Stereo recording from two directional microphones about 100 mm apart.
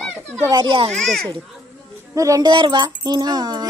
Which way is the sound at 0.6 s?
60° right (ahead or behind).